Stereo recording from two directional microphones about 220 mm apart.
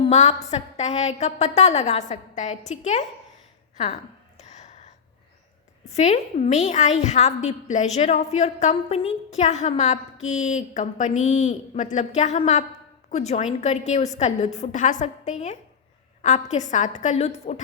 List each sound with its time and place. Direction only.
0.0 s a woman's voice: 30° left (ahead or behind)
4.4 s a sound: 30° left (ahead or behind)
5.9 s a woman's voice: 30° left (ahead or behind)